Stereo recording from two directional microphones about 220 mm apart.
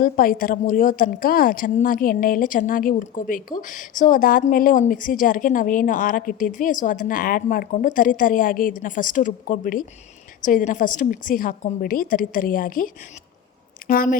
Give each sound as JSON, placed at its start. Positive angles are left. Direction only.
{"t": 0.0, "sound": "a woman's voice", "side_deg": 40}